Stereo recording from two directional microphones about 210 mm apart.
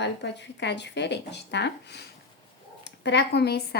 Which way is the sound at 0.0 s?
55° left (ahead or behind).